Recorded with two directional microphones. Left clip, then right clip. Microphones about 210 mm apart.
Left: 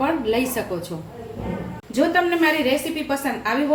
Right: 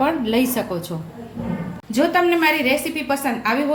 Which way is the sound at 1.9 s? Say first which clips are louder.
Right 2 dB; 40° right (ahead or behind).